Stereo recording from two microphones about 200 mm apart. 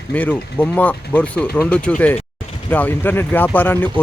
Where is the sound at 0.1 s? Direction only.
5° left (ahead or behind).